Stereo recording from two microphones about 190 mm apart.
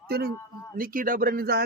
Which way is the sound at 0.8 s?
45° right (ahead or behind).